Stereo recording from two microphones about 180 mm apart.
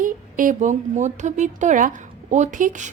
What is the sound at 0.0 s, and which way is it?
A woman's voice, 50° right (ahead or behind).